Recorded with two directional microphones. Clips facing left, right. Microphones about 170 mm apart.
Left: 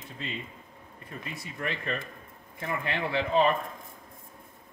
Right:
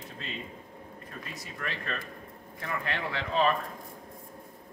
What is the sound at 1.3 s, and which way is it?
Speech, 25° left (ahead or behind).